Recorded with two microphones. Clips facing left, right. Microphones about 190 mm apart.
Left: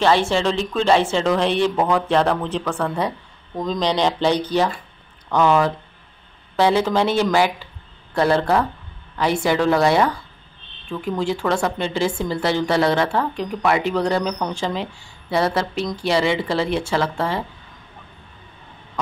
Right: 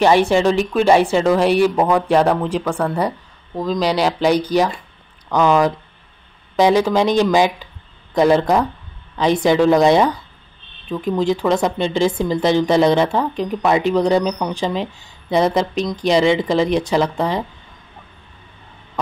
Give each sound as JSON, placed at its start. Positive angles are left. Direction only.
{"t": 0.0, "sound": "speech", "side_deg": -15}